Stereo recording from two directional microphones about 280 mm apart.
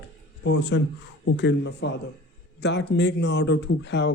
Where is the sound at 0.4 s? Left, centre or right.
Left.